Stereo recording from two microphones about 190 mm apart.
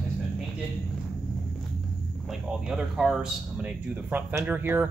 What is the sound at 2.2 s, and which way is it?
Speech, centre (ahead or behind).